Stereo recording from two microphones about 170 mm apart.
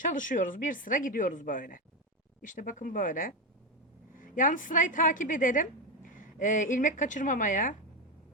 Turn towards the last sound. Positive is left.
turn(degrees=50)  # may be behind; listen again after turning